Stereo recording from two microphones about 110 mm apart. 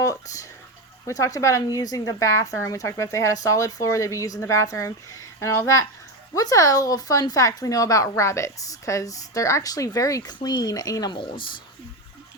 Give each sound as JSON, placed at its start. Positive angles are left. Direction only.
{"t": 0.0, "sound": "speech", "side_deg": 30}
{"t": 11.2, "sound": "speech", "side_deg": 45}